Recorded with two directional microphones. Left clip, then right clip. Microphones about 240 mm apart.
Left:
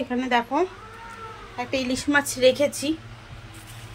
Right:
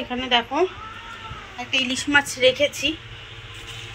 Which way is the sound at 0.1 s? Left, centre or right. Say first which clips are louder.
Right 2 dB; centre.